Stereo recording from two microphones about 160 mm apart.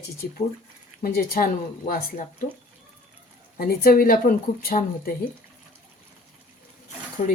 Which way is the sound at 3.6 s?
70° left (ahead or behind).